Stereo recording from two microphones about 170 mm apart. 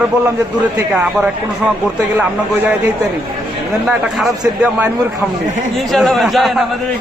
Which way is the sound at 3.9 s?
5° right (ahead or behind).